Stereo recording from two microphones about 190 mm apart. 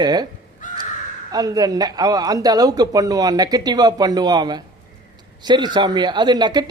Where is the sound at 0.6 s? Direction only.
45° left (ahead or behind).